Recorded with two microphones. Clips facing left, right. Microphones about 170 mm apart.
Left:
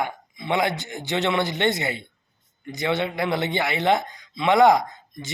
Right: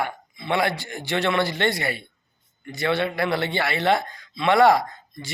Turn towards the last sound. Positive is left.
turn(degrees=20)  # may be behind; listen again after turning